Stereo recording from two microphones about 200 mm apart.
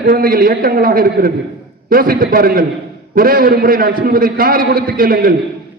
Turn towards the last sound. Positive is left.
turn(degrees=-45)  # may be behind; listen again after turning